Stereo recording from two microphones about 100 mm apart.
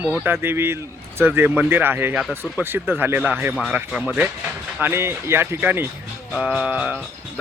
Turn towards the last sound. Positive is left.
turn(degrees=-10)  # may be behind; listen again after turning